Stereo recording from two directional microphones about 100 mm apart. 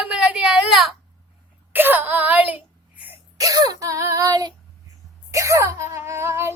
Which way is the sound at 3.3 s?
35° right (ahead or behind).